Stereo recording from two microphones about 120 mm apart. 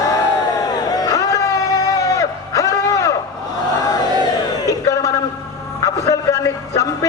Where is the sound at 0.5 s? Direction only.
30° left (ahead or behind).